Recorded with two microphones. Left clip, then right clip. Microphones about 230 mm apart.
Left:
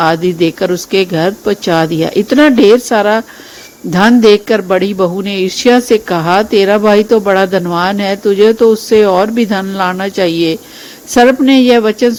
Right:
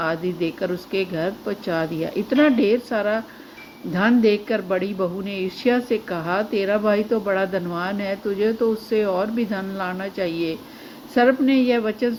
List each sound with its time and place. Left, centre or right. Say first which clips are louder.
0.0 s speech: left 13 dB; left